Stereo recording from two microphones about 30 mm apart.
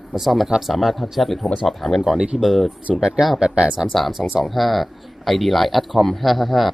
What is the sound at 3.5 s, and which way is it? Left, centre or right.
Speech, right.